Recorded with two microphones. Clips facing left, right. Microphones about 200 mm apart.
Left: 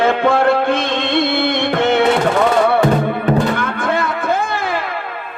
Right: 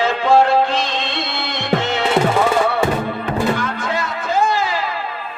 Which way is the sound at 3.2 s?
55° left (ahead or behind).